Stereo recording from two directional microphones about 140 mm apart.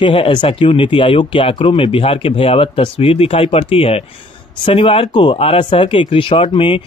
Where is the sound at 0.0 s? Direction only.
40° left (ahead or behind).